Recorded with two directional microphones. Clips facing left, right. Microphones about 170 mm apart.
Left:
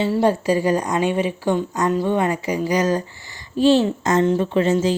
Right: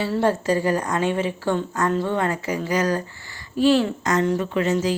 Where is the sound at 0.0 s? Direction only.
15° left (ahead or behind).